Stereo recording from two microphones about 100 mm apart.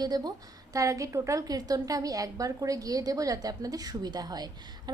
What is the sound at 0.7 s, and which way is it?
A woman's voice, 35° right (ahead or behind).